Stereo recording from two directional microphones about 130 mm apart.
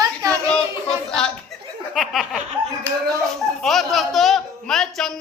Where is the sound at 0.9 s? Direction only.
5° left (ahead or behind).